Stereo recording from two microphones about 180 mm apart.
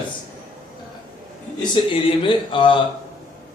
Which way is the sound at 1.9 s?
30° left (ahead or behind).